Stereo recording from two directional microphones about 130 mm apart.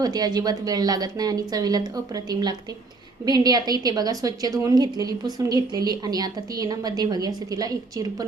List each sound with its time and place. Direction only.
0.0 s a woman's voice: 30° right (ahead or behind)